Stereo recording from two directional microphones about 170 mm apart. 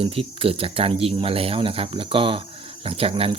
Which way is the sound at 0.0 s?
35° right (ahead or behind).